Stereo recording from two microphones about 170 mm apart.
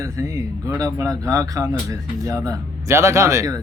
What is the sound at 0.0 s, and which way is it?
Speech, 15° right (ahead or behind).